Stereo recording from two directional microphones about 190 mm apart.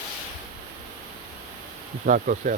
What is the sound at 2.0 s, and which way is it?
Speech, 45° right (ahead or behind).